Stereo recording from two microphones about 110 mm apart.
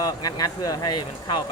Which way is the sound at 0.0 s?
35° left (ahead or behind).